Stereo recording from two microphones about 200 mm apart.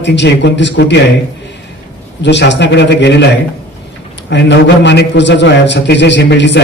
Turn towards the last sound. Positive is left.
turn(degrees=60)  # may be behind; listen again after turning